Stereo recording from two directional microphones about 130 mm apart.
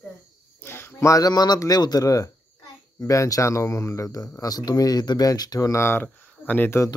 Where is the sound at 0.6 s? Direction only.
20° left (ahead or behind).